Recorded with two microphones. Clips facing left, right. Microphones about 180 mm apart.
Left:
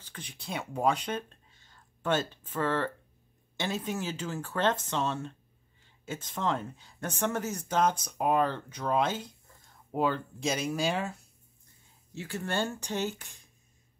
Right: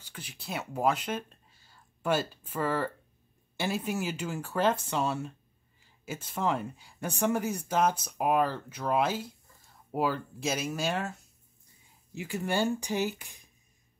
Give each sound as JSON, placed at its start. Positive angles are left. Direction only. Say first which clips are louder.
{"t": 0.0, "sound": "speech", "louder": "even", "side_deg": -5}
{"t": 12.1, "sound": "speech", "louder": "right 3 dB", "side_deg": -15}